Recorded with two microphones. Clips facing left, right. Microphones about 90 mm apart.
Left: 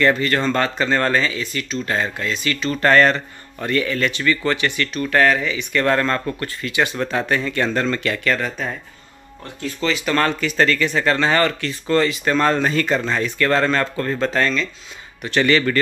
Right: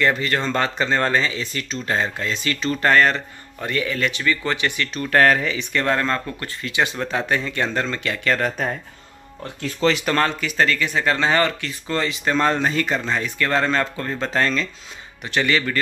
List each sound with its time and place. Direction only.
0.0 s speech: 15° right (ahead or behind); by 2.8 s 30° right (ahead or behind)
2.8 s speech: 5° right (ahead or behind)
5.1 s speech: 40° right (ahead or behind)
5.9 s speech: 10° right (ahead or behind)
6.4 s speech: 25° right (ahead or behind)
8.4 s speech: 50° right (ahead or behind)
9.8 s speech: 60° right (ahead or behind)
10.1 s speech: 15° right (ahead or behind)
14.3 s speech: 35° right (ahead or behind)
15.2 s speech: 10° right (ahead or behind)